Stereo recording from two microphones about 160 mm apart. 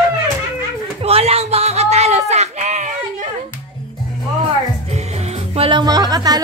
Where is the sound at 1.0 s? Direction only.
40° right (ahead or behind).